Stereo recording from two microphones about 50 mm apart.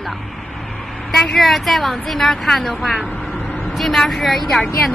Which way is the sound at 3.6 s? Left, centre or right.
Centre.